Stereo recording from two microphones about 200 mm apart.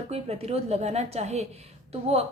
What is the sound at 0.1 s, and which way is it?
A woman's voice, 30° right (ahead or behind).